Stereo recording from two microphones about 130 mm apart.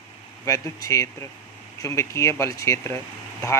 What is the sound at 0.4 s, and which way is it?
Speech, 25° left (ahead or behind).